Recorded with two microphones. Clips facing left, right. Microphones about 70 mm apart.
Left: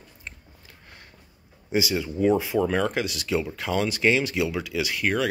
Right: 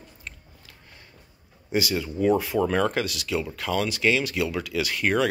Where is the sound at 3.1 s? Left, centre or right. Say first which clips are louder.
Left 2 dB; left.